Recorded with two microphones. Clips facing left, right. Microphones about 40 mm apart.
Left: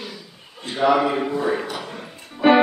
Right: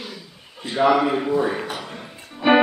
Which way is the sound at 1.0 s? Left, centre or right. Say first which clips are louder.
Even; centre.